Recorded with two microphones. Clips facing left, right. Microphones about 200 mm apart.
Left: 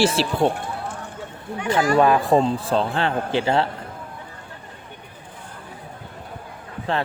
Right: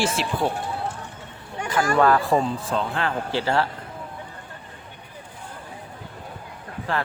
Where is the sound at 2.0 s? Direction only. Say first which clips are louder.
Left 1 dB; 15° left (ahead or behind).